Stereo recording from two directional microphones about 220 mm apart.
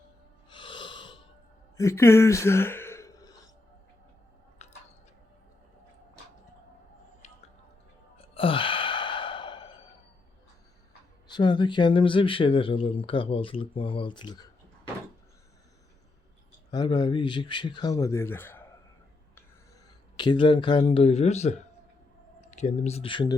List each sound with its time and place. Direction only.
0.5 s wheeze: 20° left (ahead or behind)
1.7 s a sound: 15° left (ahead or behind)
8.1 s sigh: 25° left (ahead or behind)
11.3 s speech: 20° left (ahead or behind)
16.7 s speech: 20° left (ahead or behind)
20.1 s speech: 20° left (ahead or behind)